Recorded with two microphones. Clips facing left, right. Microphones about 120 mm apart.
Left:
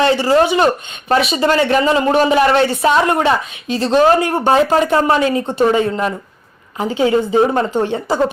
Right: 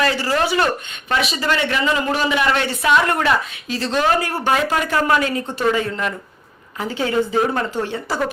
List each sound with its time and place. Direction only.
0.0 s a woman's voice: 25° left (ahead or behind)
3.1 s a woman's voice: 25° left (ahead or behind)